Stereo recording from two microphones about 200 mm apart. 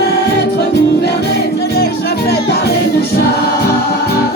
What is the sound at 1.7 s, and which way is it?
Music, 55° left (ahead or behind).